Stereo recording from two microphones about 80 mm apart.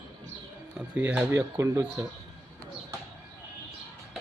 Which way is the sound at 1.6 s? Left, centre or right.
Right.